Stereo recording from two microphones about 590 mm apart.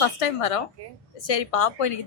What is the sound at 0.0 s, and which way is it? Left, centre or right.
A woman's voice, left.